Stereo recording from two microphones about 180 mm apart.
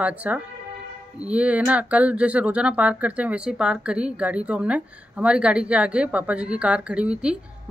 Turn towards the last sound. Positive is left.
turn(degrees=-5)  # may be behind; listen again after turning